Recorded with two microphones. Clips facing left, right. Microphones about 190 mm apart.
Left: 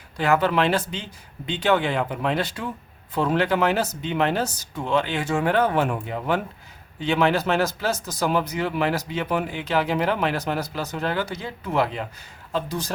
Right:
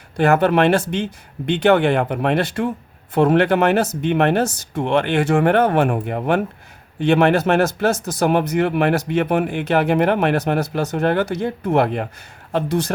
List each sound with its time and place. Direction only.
0.2 s speech: 60° right (ahead or behind)
1.6 s speech: 70° right (ahead or behind)
7.0 s speech: 70° right (ahead or behind)